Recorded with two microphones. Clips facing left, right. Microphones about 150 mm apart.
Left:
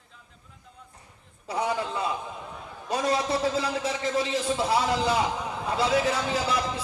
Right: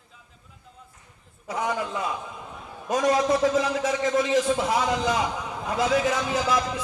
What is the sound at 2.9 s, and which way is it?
A man's voice, 30° left (ahead or behind).